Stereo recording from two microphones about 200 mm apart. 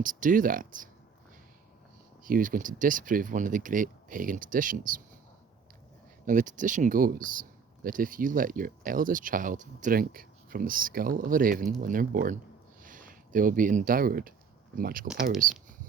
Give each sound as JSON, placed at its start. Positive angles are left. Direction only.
{"t": 0.0, "sound": "speech", "side_deg": -40}
{"t": 2.2, "sound": "speech", "side_deg": -45}
{"t": 6.2, "sound": "speech", "side_deg": -40}
{"t": 15.0, "sound": "speech", "side_deg": -5}